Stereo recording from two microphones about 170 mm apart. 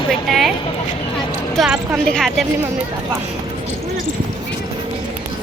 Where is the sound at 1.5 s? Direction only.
5° right (ahead or behind).